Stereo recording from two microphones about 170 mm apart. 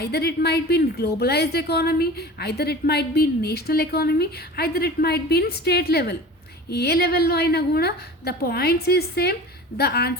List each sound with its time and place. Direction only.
0.0 s a woman's voice: 70° left (ahead or behind)